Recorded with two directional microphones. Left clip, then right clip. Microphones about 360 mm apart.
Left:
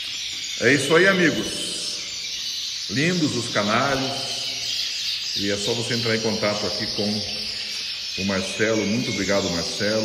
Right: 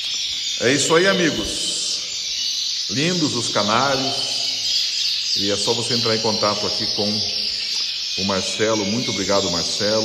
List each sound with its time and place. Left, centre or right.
0.7 s speech: centre
3.0 s speech: centre
8.3 s speech: centre